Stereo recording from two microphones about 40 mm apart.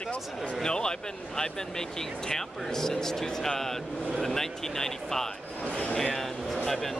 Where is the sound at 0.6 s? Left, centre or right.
Centre.